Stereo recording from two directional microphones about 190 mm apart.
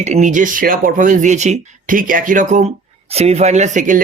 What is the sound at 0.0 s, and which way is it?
Speech, 40° right (ahead or behind).